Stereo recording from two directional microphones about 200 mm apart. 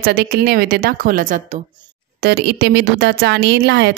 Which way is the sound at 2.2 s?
55° right (ahead or behind).